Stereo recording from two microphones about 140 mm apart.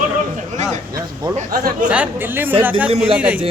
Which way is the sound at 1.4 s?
75° right (ahead or behind).